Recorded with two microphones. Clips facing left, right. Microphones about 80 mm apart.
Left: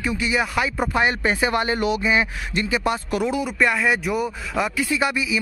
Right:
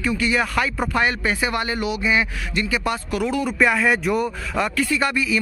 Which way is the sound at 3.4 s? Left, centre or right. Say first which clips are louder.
Right 2 dB; centre.